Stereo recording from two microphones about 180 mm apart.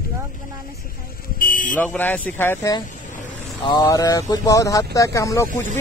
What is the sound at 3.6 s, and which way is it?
Speech, 25° left (ahead or behind).